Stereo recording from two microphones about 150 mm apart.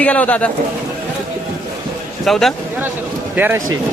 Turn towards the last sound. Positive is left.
turn(degrees=-10)  # may be behind; listen again after turning